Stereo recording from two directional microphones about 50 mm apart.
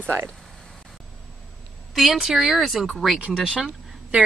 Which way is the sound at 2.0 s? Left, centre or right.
Centre.